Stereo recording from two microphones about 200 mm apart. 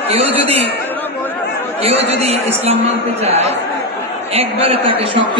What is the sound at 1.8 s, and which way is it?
A man's voice, 30° right (ahead or behind).